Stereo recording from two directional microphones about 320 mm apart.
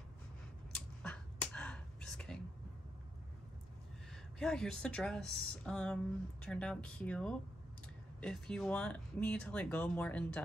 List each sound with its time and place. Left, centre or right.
0.7 s finger snapping: centre
4.1 s a woman's voice: centre